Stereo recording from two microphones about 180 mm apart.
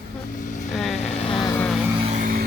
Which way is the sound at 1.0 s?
35° left (ahead or behind).